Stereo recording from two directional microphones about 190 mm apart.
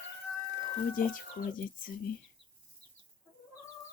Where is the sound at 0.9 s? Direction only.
45° left (ahead or behind).